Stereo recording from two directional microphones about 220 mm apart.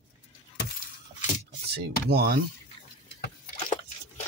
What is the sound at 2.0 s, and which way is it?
Speech, 45° right (ahead or behind).